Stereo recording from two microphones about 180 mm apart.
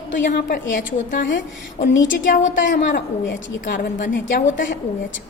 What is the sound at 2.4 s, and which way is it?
Speech, 90° left.